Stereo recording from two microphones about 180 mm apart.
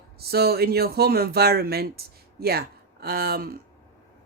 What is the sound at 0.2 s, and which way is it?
Speech, 60° right (ahead or behind).